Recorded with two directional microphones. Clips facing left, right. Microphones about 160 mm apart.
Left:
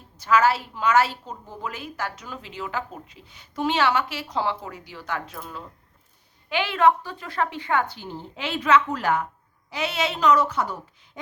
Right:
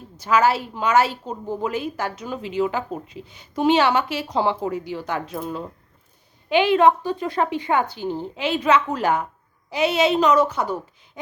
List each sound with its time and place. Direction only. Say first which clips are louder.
0.2 s a woman's voice: right 2 dB; 15° right (ahead or behind)